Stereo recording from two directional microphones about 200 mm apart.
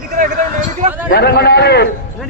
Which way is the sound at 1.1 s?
55° left (ahead or behind).